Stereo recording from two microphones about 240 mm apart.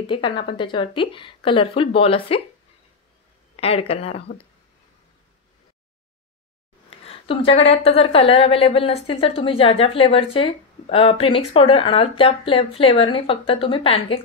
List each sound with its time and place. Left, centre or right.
0.0 s a woman's voice: left
3.5 s a woman's voice: left
6.9 s a sound: left
7.7 s a woman's voice: left